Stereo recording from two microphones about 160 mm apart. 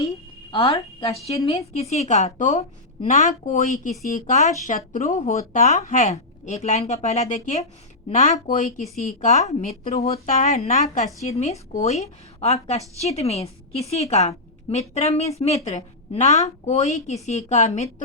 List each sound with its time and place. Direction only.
0.5 s a woman's voice: 35° left (ahead or behind); by 8.7 s 55° left (ahead or behind)
9.3 s a woman's voice: 45° left (ahead or behind)
10.1 s speech: 65° left (ahead or behind)
10.5 s a woman's voice: 45° left (ahead or behind)